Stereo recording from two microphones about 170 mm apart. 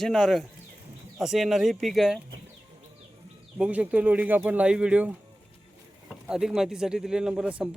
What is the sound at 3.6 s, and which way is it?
Speech, 10° right (ahead or behind).